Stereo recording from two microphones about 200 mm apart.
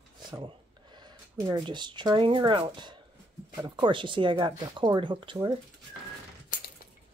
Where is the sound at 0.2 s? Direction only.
20° right (ahead or behind).